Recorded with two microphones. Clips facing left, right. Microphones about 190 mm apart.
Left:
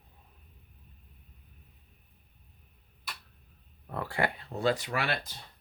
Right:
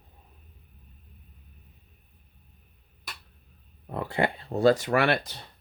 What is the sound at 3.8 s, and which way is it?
Speech, 20° right (ahead or behind).